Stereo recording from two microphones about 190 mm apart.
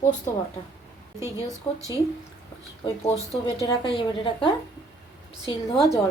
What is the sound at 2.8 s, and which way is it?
A woman's voice, 30° left (ahead or behind).